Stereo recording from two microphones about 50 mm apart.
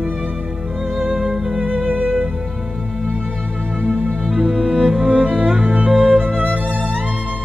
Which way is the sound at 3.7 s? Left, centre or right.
Right.